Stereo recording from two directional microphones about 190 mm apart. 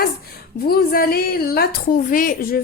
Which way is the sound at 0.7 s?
50° left (ahead or behind).